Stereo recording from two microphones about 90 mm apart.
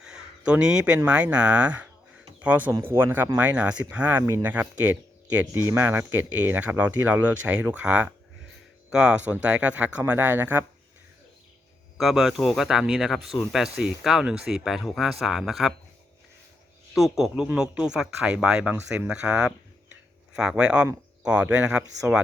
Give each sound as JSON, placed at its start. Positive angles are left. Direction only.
{"t": 0.0, "sound": "a sound", "side_deg": -10}
{"t": 0.5, "sound": "speech", "side_deg": -10}
{"t": 11.9, "sound": "speech", "side_deg": 0}
{"t": 16.9, "sound": "speech", "side_deg": -5}